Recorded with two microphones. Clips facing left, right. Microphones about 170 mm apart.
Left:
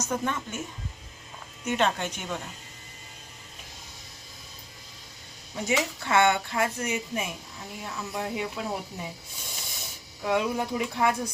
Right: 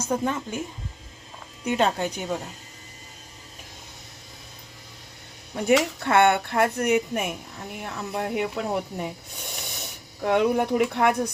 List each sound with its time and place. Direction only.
0.0 s speech: 30° right (ahead or behind)
1.7 s speech: 35° right (ahead or behind)
5.5 s speech: 60° right (ahead or behind)